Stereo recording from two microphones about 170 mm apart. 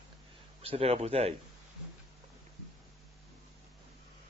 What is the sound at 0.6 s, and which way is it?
Speech, 35° right (ahead or behind).